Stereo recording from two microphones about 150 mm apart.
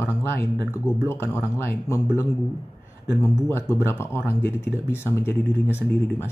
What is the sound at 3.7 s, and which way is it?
Speech, 15° left (ahead or behind).